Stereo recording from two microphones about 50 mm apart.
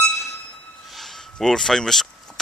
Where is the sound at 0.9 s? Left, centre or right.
Centre.